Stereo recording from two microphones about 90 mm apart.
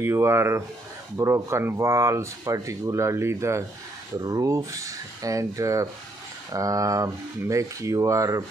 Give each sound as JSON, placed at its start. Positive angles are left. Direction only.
{"t": 0.0, "sound": "speech", "side_deg": -30}